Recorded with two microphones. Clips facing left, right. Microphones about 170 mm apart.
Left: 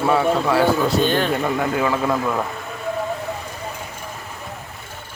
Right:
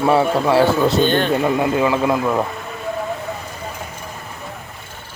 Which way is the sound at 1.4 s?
15° right (ahead or behind).